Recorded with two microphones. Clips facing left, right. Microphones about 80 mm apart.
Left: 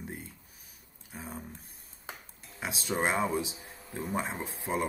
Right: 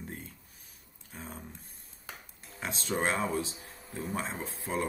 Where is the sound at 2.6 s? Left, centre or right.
Centre.